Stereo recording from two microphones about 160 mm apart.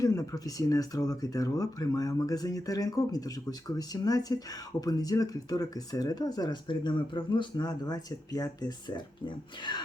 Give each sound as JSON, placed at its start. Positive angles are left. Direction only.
{"t": 0.0, "sound": "speech", "side_deg": 20}